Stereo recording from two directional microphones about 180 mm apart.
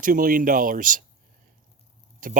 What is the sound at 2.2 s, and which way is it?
Speech, 50° right (ahead or behind).